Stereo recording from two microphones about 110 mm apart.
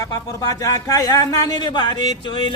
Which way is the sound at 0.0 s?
30° left (ahead or behind).